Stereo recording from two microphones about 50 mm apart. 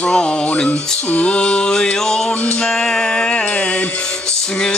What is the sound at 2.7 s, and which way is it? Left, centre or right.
Music, centre.